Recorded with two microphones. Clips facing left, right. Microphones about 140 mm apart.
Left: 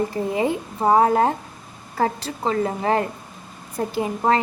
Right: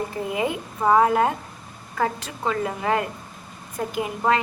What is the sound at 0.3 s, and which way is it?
A woman's voice, 30° left (ahead or behind).